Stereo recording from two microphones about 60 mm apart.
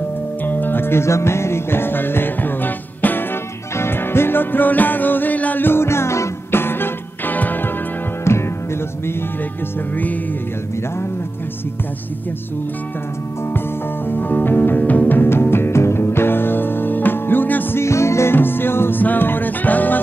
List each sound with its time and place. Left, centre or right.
0.5 s music: left
6.6 s music: left
8.2 s music: left
14.0 s music: left
14.8 s music: left
17.7 s music: left